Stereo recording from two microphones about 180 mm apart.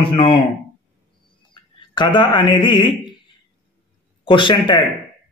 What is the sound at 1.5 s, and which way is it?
Speech, 25° left (ahead or behind).